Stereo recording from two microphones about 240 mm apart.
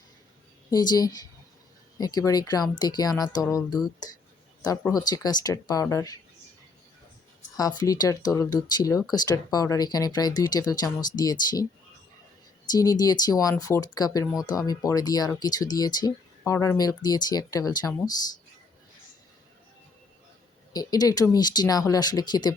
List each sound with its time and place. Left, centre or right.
0.7 s speech: centre
7.8 s speech: centre
12.7 s speech: centre
20.7 s speech: centre